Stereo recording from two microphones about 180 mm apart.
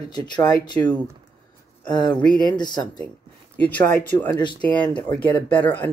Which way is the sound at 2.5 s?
25° left (ahead or behind).